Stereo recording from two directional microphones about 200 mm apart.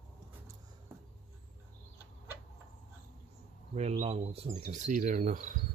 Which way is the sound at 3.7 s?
30° right (ahead or behind).